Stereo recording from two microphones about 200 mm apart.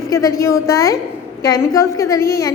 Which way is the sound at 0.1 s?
15° left (ahead or behind).